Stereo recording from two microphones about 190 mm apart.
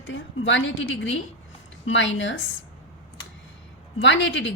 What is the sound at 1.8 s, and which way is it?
Speech, 80° left.